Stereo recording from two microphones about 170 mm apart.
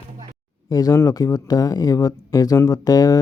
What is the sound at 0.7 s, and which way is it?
Speech, 20° left (ahead or behind).